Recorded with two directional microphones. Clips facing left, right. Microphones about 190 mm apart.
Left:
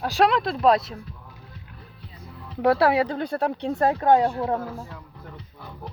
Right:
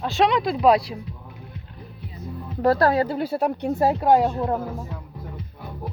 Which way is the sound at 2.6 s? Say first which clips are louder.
Right 1 dB; centre (ahead or behind).